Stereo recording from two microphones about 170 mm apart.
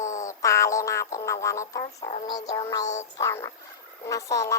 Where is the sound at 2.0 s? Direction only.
40° left (ahead or behind).